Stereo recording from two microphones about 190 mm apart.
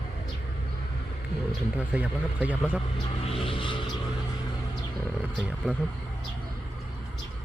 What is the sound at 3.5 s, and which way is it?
Vehicle, 25° left (ahead or behind).